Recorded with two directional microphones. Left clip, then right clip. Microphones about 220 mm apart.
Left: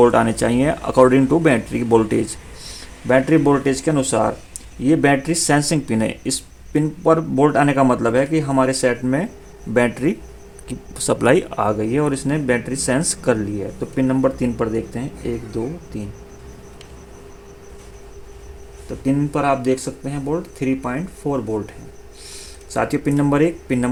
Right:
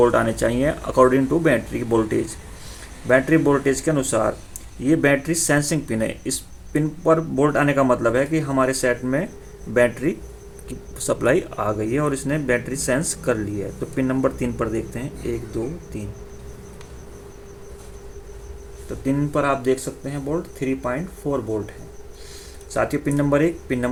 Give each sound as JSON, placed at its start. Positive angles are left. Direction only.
{"t": 0.0, "sound": "speech", "side_deg": 35}
{"t": 19.0, "sound": "speech", "side_deg": 30}
{"t": 22.7, "sound": "speech", "side_deg": 35}